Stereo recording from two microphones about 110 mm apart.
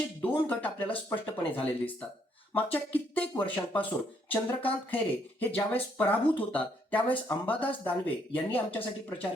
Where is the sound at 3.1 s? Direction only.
15° left (ahead or behind).